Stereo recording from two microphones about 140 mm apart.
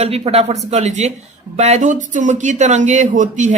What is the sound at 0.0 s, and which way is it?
Speech, 45° right (ahead or behind).